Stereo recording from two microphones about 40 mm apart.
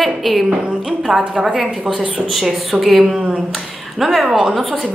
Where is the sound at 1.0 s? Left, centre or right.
Centre.